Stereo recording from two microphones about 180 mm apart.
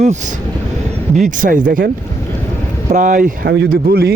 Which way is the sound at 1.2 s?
50° right (ahead or behind).